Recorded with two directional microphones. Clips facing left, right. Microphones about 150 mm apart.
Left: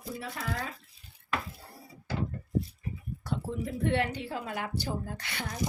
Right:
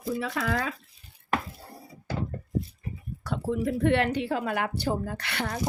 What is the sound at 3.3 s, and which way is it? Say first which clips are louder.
A woman's voice: right 6 dB; 70° right (ahead or behind).